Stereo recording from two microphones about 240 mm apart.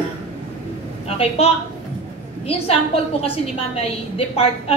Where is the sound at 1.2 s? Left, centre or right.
Left.